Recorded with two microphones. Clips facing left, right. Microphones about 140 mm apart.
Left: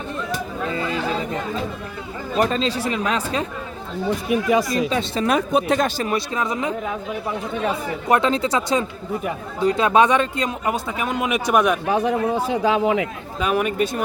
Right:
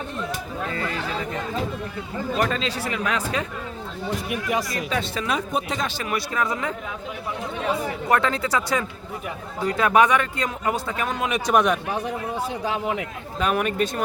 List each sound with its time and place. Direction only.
0.7 s chatter: 20° left (ahead or behind)
2.4 s speech: 30° left (ahead or behind)
4.7 s speech: 25° left (ahead or behind)
5.2 s speech: 55° left (ahead or behind)
5.5 s speech: 70° left (ahead or behind)
6.0 s speech: 25° left (ahead or behind)
8.0 s speech: 20° left (ahead or behind); by 11.8 s centre (ahead or behind)
11.9 s speech: 90° left
13.4 s speech: 5° left (ahead or behind)